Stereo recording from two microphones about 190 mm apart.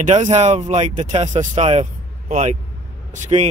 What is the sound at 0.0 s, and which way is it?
Speech, 40° right (ahead or behind).